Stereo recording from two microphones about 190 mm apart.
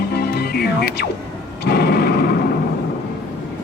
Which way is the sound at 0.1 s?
55° left (ahead or behind).